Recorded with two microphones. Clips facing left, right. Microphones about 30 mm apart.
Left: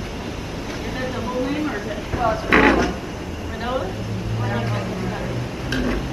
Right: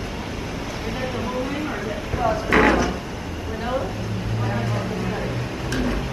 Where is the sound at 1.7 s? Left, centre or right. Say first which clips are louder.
Left 1 dB; right.